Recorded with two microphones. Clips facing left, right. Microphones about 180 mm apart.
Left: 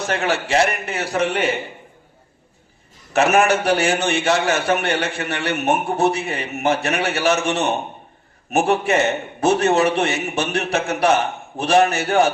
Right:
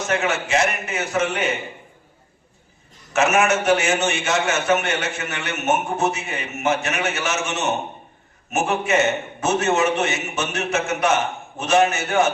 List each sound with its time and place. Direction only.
0.0 s a man's voice: 35° left (ahead or behind)
3.1 s a man's voice: 35° left (ahead or behind)